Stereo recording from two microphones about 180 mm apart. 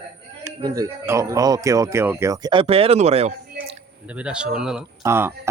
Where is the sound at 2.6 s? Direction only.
35° right (ahead or behind).